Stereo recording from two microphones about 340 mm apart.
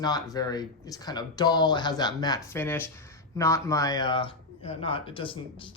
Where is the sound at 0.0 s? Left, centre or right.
Centre.